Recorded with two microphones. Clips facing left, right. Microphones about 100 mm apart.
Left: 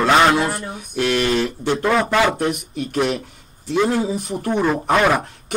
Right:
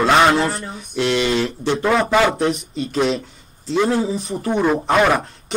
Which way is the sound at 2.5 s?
60° left (ahead or behind).